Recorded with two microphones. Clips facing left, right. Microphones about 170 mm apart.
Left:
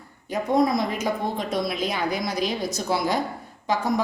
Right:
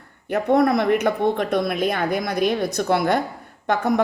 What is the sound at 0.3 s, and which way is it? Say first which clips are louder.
A woman's voice: right 4 dB; 65° right (ahead or behind).